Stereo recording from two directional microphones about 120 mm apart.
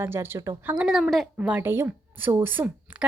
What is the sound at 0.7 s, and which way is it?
Speech, 5° right (ahead or behind).